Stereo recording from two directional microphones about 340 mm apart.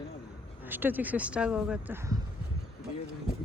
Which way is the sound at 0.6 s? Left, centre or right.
Centre.